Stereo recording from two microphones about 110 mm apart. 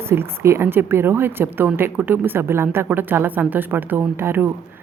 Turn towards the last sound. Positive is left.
turn(degrees=-20)  # may be behind; listen again after turning